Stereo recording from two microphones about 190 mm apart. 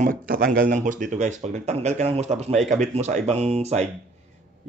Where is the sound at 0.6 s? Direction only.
45° right (ahead or behind).